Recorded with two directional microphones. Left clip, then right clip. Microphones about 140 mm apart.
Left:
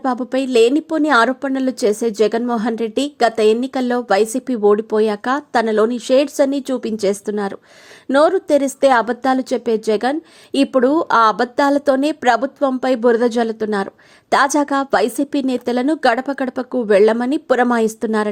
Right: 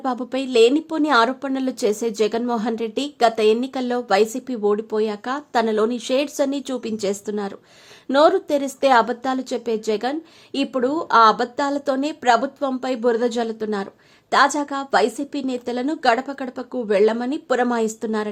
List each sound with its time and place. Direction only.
0.0 s a woman's voice: 25° left (ahead or behind)